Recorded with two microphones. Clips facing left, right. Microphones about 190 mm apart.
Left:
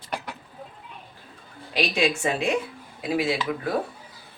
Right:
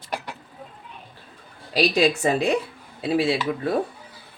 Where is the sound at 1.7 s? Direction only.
35° right (ahead or behind).